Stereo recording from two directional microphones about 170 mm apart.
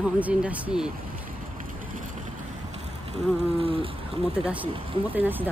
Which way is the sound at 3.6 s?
35° right (ahead or behind).